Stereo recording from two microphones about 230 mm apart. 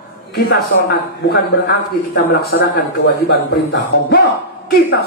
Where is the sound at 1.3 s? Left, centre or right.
Left.